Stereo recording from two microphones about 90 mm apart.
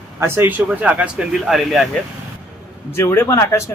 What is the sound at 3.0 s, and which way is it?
Speech, 30° left (ahead or behind).